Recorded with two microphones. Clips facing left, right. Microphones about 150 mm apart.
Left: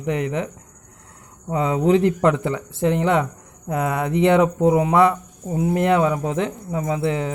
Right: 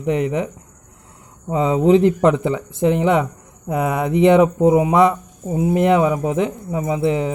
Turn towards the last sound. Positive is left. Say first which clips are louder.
# right 3 dB
turn(degrees=-20)  # may be behind; listen again after turning